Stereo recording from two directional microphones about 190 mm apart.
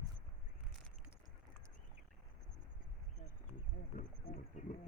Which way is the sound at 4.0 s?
45° left (ahead or behind).